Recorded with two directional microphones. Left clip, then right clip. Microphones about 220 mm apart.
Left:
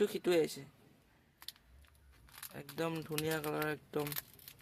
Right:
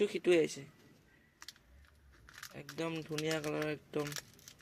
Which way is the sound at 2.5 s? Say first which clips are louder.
Left 1 dB; 20° left (ahead or behind).